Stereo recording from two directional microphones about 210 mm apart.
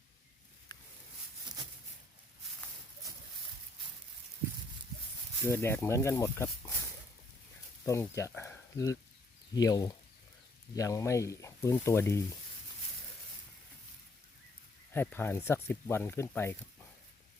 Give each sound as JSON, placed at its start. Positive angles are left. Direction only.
{"t": 5.5, "sound": "speech", "side_deg": 10}
{"t": 7.9, "sound": "speech", "side_deg": 15}
{"t": 14.9, "sound": "speech", "side_deg": 10}